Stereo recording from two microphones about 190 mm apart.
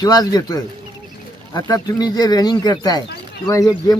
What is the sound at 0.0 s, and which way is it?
Speech, 20° left (ahead or behind).